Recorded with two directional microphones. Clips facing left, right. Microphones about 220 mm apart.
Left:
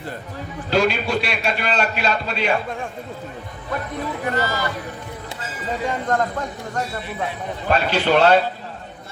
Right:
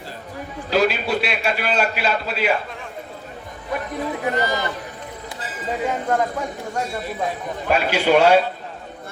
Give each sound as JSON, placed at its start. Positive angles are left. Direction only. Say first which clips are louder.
{"t": 0.7, "sound": "a man's voice", "louder": "even", "side_deg": -5}
{"t": 4.4, "sound": "a man's voice", "louder": "left 1 dB", "side_deg": -20}
{"t": 5.8, "sound": "a man's voice", "louder": "right 1 dB", "side_deg": -5}
{"t": 7.7, "sound": "a man's voice", "louder": "right 1 dB", "side_deg": -10}